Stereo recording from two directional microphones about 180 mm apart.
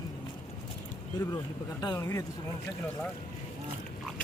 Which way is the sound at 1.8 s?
20° left (ahead or behind).